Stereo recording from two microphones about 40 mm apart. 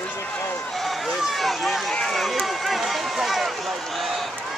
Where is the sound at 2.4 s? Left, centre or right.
Centre.